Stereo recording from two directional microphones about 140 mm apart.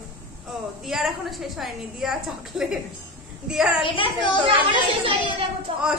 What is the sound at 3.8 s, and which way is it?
Speech, 35° left (ahead or behind).